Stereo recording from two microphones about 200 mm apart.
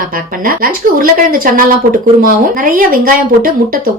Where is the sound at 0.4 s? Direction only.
45° right (ahead or behind).